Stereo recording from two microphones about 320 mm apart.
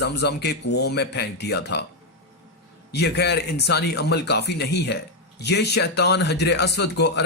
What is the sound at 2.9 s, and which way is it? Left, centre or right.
Speech, left.